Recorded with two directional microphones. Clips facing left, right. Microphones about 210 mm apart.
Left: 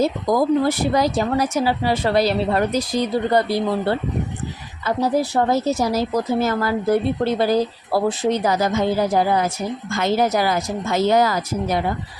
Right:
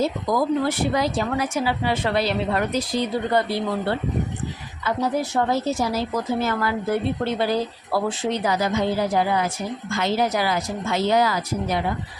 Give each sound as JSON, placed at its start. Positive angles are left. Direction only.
{"t": 0.0, "sound": "speech", "side_deg": 40}
{"t": 4.9, "sound": "a woman's voice", "side_deg": 35}